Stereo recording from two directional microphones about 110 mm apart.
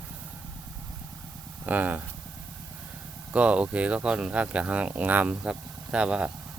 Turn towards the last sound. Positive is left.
turn(degrees=-10)  # may be behind; listen again after turning